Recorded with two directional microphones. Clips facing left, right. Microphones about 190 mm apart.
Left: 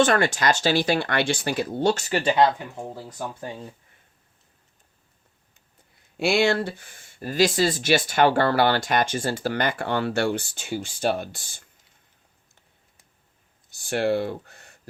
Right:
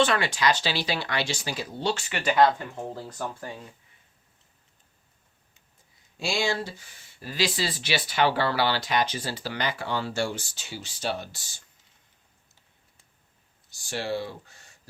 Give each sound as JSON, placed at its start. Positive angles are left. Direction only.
{"t": 0.0, "sound": "speech", "side_deg": 45}
{"t": 2.2, "sound": "speech", "side_deg": 25}
{"t": 2.5, "sound": "speech", "side_deg": 10}
{"t": 3.4, "sound": "speech", "side_deg": 25}
{"t": 6.1, "sound": "speech", "side_deg": 60}
{"t": 13.7, "sound": "speech", "side_deg": 60}